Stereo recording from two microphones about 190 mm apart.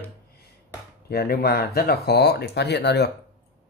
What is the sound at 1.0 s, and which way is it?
Speech, 55° left (ahead or behind).